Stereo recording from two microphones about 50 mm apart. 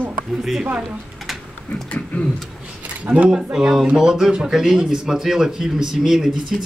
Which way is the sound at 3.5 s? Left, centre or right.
Centre.